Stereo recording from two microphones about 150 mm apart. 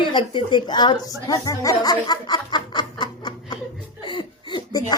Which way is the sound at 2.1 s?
30° left (ahead or behind).